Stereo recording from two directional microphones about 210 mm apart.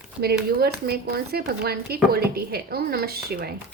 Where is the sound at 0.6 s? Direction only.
50° right (ahead or behind).